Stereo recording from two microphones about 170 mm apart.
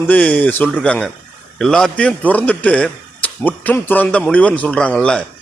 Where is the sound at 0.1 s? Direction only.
10° left (ahead or behind).